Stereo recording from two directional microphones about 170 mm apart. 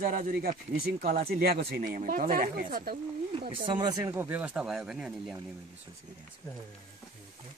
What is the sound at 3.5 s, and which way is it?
Speech, 30° right (ahead or behind).